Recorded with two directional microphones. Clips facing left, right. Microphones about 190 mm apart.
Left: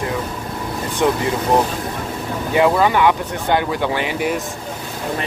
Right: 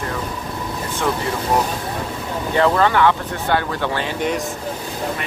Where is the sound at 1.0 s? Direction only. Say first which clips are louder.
Left 5 dB; 20° left (ahead or behind).